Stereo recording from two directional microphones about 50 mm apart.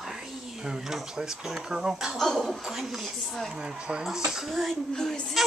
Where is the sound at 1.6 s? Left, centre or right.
Centre.